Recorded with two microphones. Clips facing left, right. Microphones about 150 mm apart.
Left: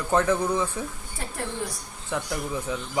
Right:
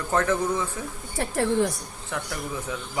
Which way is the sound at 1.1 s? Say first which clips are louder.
Right 9 dB; 90° right.